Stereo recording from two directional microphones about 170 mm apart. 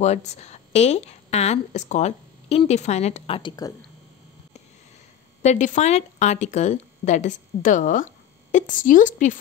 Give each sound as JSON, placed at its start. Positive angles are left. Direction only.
{"t": 0.0, "sound": "a woman's voice", "side_deg": 40}
{"t": 5.4, "sound": "speech", "side_deg": 45}